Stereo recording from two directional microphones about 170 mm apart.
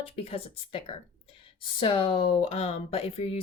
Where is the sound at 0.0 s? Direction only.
35° left (ahead or behind).